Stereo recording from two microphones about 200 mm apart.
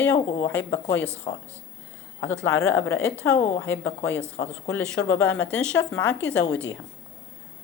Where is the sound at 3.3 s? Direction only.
35° left (ahead or behind).